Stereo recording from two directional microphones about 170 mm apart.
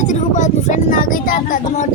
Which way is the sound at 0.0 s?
45° left (ahead or behind).